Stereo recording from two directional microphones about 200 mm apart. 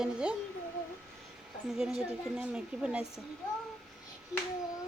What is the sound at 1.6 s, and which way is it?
Speech, centre (ahead or behind).